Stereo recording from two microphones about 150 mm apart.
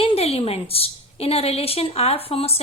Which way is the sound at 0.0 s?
40° left (ahead or behind).